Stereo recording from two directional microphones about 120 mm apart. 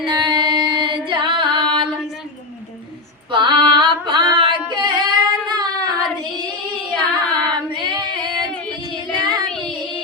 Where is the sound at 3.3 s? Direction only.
45° right (ahead or behind).